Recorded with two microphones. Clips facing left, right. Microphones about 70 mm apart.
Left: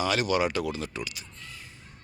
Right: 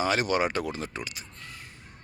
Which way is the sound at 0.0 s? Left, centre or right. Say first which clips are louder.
Even; right.